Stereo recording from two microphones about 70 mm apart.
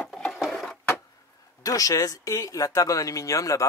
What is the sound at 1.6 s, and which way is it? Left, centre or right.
Speech, left.